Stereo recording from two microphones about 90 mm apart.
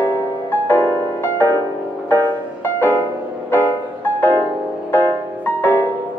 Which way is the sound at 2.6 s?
25° left (ahead or behind).